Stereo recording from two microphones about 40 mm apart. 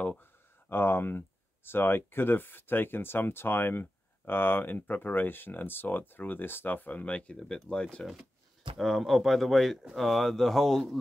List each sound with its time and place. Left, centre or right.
0.7 s speech: left
7.0 s speech: left
7.3 s speech: centre
8.7 s speech: centre